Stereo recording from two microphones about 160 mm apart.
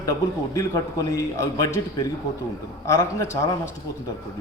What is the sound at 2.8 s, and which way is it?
Speech, 20° left (ahead or behind).